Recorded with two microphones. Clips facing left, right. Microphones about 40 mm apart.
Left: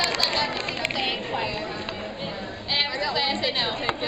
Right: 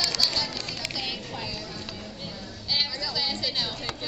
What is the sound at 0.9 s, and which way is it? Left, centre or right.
Music, left.